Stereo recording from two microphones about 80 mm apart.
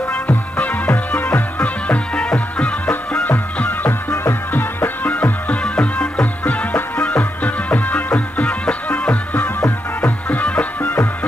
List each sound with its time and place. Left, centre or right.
0.1 s music: centre
4.1 s music: left